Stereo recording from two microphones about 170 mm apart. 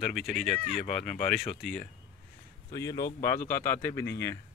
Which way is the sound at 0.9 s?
45° left (ahead or behind).